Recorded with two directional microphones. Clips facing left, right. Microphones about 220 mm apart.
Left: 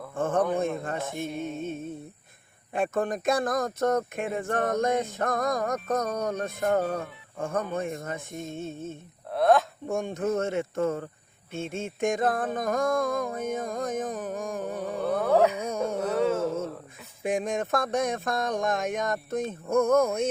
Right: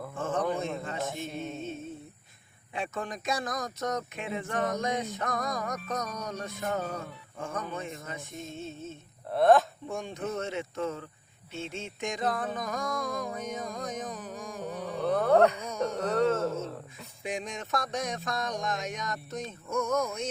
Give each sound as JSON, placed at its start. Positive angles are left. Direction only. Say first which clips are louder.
{"t": 0.1, "sound": "a sound", "louder": "left 6 dB", "side_deg": 55}
{"t": 0.9, "sound": "speech", "louder": "left 3 dB", "side_deg": 55}
{"t": 1.4, "sound": "music", "louder": "left 4 dB", "side_deg": 55}
{"t": 2.7, "sound": "speech", "louder": "left 8 dB", "side_deg": 50}
{"t": 9.3, "sound": "speech", "louder": "even", "side_deg": 0}
{"t": 9.8, "sound": "speech", "louder": "left 6 dB", "side_deg": 50}
{"t": 11.5, "sound": "music", "louder": "left 5 dB", "side_deg": 50}
{"t": 15.0, "sound": "a sound", "louder": "even", "side_deg": 5}
{"t": 16.0, "sound": "speech", "louder": "even", "side_deg": 5}
{"t": 17.2, "sound": "speech", "louder": "left 8 dB", "side_deg": 55}